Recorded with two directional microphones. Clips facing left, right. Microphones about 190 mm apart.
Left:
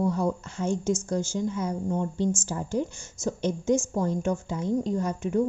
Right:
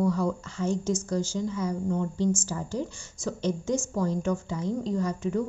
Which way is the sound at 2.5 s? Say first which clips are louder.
Left 3 dB; 55° left (ahead or behind).